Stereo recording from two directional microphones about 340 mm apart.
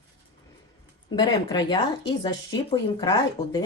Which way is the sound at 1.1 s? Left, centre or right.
Centre.